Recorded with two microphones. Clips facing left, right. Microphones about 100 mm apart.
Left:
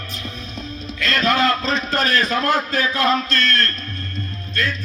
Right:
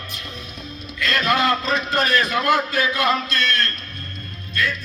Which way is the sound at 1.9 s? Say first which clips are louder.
Even; 40° left (ahead or behind).